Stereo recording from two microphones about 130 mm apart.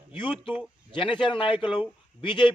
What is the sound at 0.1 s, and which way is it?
A man's voice, 40° left (ahead or behind).